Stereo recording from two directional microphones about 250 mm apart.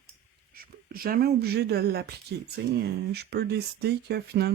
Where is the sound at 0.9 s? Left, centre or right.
Right.